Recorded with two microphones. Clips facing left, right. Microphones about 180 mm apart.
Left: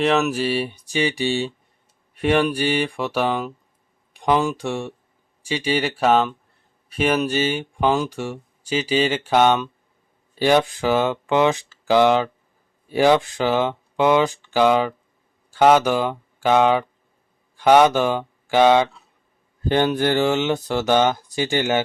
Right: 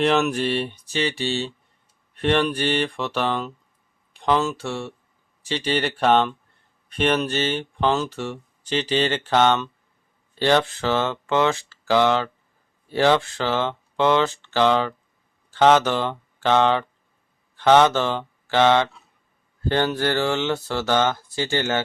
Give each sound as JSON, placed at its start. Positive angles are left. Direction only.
{"t": 0.0, "sound": "speech", "side_deg": 0}